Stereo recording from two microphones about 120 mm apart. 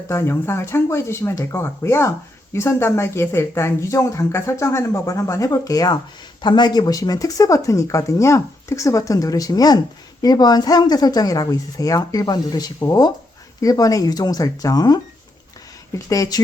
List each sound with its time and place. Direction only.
0.1 s speech: 20° left (ahead or behind)